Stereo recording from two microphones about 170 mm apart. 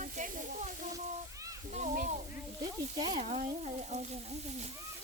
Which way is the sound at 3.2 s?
45° right (ahead or behind).